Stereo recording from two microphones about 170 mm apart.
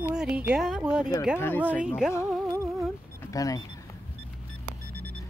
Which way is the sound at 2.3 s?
Centre (ahead or behind).